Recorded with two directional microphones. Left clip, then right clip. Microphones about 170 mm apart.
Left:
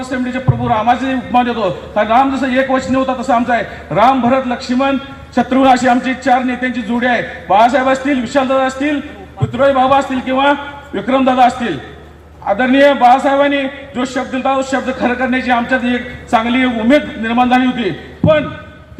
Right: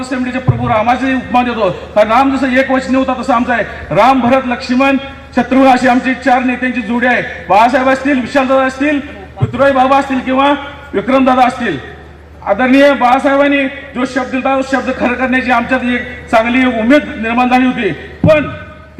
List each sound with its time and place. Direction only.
0.1 s a man's voice: 25° left (ahead or behind)